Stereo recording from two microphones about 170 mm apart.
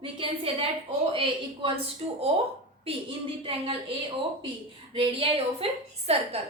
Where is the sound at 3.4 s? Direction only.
35° right (ahead or behind).